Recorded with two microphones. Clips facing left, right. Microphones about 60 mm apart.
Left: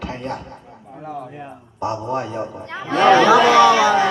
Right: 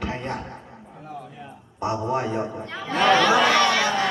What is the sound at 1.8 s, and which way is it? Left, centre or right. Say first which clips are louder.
Speech: left 1 dB; centre.